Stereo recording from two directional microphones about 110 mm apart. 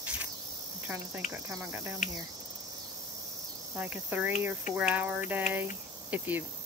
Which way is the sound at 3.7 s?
15° right (ahead or behind).